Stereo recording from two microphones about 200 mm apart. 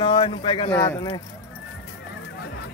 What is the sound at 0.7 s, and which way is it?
Speech, 15° left (ahead or behind).